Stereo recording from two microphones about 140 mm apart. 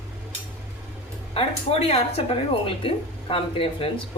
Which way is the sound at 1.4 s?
45° left (ahead or behind).